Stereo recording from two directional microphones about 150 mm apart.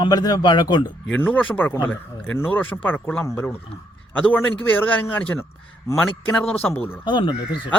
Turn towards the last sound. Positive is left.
turn(degrees=35)  # may be behind; listen again after turning